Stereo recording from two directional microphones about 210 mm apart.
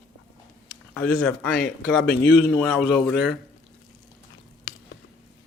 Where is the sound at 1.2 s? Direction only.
5° left (ahead or behind).